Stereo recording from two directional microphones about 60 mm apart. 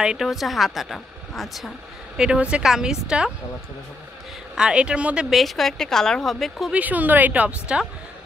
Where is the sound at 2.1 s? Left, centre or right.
Centre.